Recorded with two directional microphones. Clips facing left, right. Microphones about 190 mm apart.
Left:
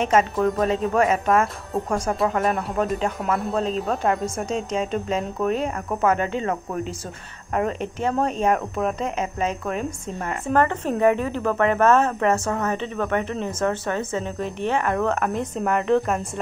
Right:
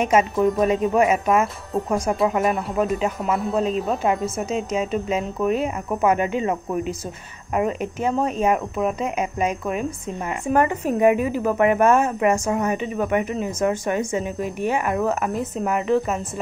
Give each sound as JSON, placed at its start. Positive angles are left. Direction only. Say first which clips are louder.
{"t": 0.0, "sound": "speech", "louder": "right 1 dB", "side_deg": -10}